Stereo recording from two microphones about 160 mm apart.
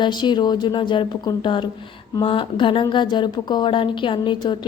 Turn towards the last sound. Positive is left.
turn(degrees=30)  # may be behind; listen again after turning